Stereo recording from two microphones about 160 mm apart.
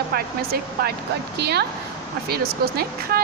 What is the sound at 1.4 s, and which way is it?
Speech, 90° right.